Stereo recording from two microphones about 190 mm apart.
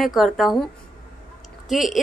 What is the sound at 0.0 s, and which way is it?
Speech, centre (ahead or behind).